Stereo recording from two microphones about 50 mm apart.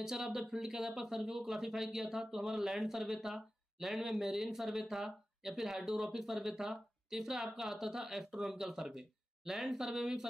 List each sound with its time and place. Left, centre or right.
0.0 s speech: centre